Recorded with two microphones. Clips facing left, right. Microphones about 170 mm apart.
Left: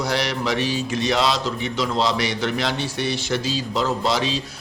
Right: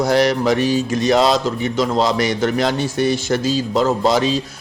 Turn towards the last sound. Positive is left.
turn(degrees=-45)  # may be behind; listen again after turning